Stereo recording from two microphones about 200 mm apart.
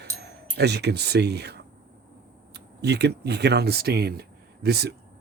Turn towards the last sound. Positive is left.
turn(degrees=-55)  # may be behind; listen again after turning